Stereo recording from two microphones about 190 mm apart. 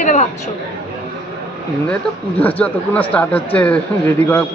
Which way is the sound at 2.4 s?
5° left (ahead or behind).